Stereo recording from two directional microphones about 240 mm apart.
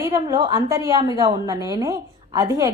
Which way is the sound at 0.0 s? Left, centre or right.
Centre.